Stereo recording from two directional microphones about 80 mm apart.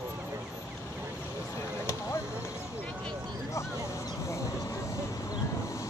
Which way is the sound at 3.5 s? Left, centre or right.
Left.